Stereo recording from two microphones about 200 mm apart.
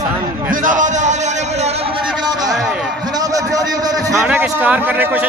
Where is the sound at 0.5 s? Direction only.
40° right (ahead or behind).